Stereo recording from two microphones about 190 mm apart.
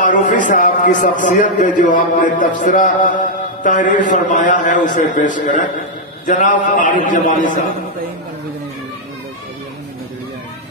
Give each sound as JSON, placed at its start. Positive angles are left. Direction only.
{"t": 0.0, "sound": "a man's voice", "side_deg": 40}